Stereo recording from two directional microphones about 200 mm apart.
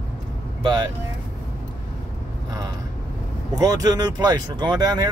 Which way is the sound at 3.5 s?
20° right (ahead or behind).